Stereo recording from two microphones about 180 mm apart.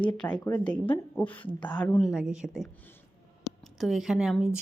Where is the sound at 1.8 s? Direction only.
5° left (ahead or behind).